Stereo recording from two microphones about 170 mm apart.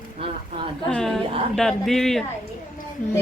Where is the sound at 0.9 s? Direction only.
5° left (ahead or behind).